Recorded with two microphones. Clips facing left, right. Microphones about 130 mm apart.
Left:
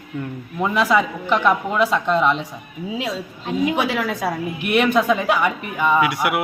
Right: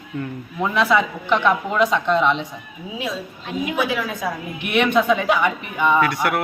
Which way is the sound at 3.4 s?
30° left (ahead or behind).